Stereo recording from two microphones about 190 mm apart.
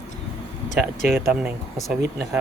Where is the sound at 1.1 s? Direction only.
10° right (ahead or behind).